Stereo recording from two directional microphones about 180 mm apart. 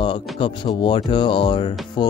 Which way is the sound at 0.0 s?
30° left (ahead or behind).